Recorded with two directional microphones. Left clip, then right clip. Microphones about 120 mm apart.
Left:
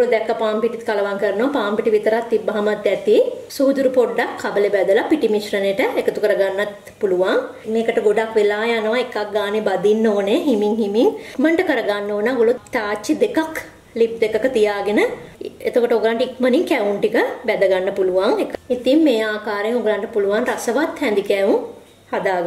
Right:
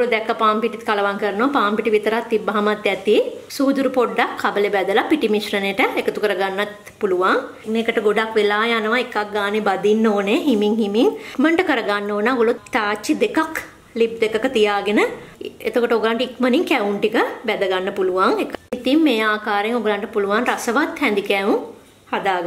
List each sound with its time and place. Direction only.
0.0 s a woman's voice: 25° right (ahead or behind)